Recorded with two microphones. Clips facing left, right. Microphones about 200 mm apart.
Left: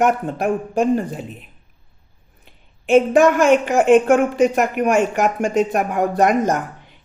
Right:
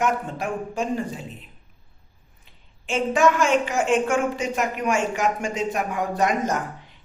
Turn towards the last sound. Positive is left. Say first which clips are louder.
# left 6 dB
turn(degrees=60)  # may be behind; listen again after turning